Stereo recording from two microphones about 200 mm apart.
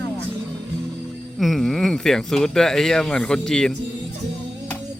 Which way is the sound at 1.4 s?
Centre (ahead or behind).